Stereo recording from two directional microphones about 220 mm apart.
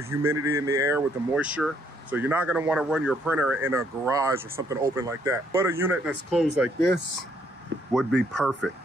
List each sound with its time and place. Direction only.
0.1 s speech: 10° right (ahead or behind)